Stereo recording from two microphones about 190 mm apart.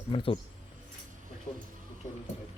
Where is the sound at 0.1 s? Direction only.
30° left (ahead or behind).